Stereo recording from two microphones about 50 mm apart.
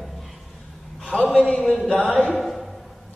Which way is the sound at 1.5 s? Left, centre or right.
Centre.